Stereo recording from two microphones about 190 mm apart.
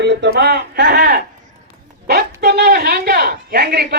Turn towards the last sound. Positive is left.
turn(degrees=-55)  # may be behind; listen again after turning